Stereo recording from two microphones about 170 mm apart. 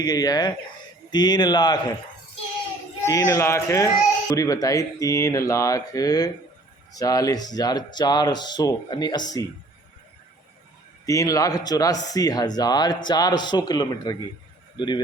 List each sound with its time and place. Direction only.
0.0 s speech: 20° left (ahead or behind)
3.1 s speech: 20° left (ahead or behind)
11.0 s speech: 20° left (ahead or behind)